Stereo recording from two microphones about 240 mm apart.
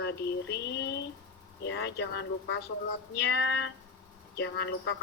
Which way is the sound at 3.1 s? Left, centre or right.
Left.